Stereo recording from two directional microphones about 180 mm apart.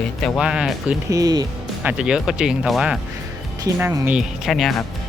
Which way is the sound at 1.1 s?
20° right (ahead or behind).